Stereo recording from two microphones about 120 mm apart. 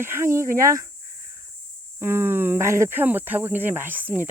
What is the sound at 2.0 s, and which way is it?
Speech, 20° right (ahead or behind).